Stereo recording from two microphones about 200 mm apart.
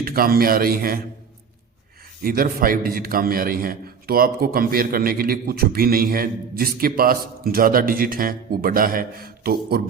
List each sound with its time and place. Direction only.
0.0 s a man's voice: 45° right (ahead or behind)
2.2 s a man's voice: 45° right (ahead or behind)